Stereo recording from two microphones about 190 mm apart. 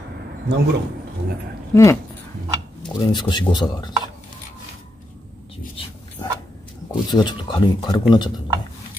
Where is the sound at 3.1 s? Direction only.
25° left (ahead or behind).